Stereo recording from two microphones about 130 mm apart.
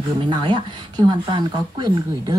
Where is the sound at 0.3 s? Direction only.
35° right (ahead or behind).